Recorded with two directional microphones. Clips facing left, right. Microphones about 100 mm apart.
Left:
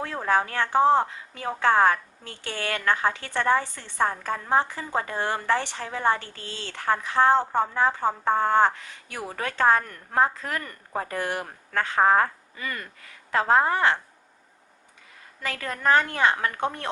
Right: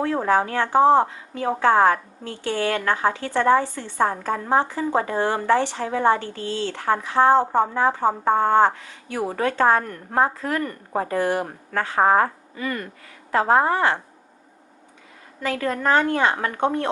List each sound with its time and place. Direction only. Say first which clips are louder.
0.3 s a woman's voice: even; 15° right (ahead or behind)
15.4 s a woman's voice: right 7 dB; 15° right (ahead or behind)